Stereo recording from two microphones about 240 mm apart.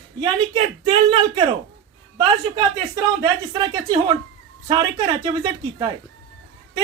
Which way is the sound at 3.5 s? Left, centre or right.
Centre.